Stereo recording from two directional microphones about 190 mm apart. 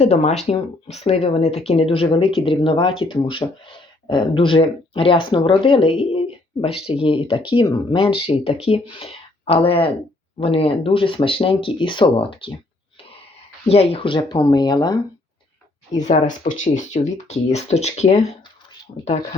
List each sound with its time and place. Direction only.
0.0 s speech: 35° left (ahead or behind)
13.7 s speech: 30° left (ahead or behind)
16.0 s speech: 40° left (ahead or behind)